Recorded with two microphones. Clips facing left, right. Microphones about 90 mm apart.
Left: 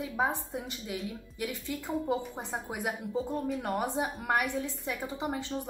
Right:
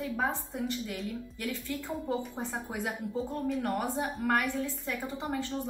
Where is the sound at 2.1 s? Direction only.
15° left (ahead or behind).